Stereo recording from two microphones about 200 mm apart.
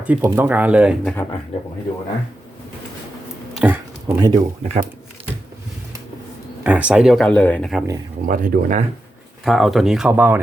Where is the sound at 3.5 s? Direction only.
10° right (ahead or behind).